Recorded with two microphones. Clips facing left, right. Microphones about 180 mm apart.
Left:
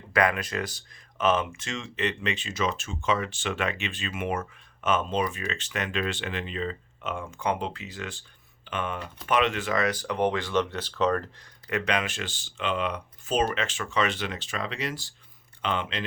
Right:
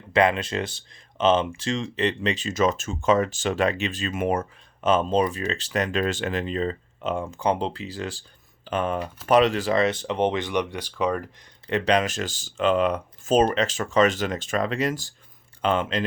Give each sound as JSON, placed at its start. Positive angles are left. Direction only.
{"t": 0.1, "sound": "speech", "side_deg": -25}
{"t": 11.7, "sound": "speech", "side_deg": -35}